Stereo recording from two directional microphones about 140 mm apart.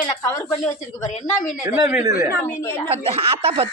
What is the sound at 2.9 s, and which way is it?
Speech, 45° right (ahead or behind).